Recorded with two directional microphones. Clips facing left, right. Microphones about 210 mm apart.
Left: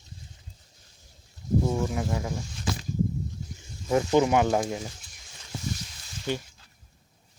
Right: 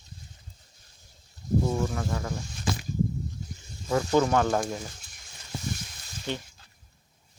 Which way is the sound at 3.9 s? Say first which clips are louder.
Left 2 dB; 15° left (ahead or behind).